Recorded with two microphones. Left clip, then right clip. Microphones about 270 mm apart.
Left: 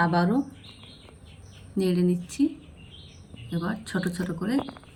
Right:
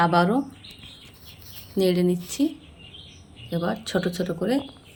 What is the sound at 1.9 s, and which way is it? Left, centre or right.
Speech, right.